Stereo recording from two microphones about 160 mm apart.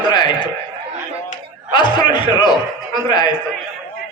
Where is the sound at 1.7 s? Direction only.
30° left (ahead or behind).